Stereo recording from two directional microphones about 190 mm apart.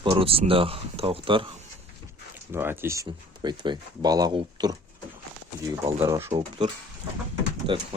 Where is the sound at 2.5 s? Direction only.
10° right (ahead or behind).